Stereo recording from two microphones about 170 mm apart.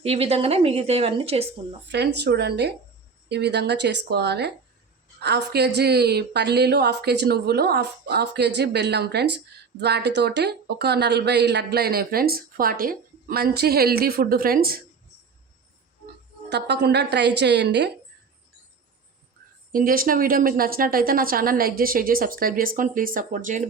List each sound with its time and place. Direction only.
0.0 s a woman's voice: 35° right (ahead or behind)
1.9 s a woman's voice: 85° right; by 14.8 s 60° right (ahead or behind)
16.5 s a woman's voice: 80° right
19.7 s speech: 55° right (ahead or behind)